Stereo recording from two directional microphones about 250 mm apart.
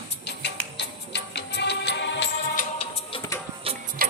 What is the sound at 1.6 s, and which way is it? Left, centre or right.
Music, left.